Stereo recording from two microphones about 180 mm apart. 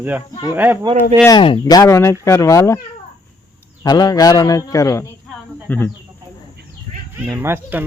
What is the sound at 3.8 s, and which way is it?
A man's voice, 20° left (ahead or behind).